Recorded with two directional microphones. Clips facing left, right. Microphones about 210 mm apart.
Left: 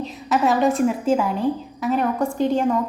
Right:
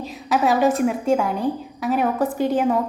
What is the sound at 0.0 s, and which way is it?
A woman's voice, centre (ahead or behind).